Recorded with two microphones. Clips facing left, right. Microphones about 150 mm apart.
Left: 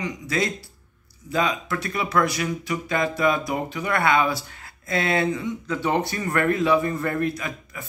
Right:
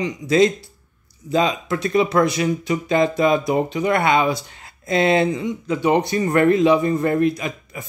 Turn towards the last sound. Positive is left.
turn(degrees=-20)  # may be behind; listen again after turning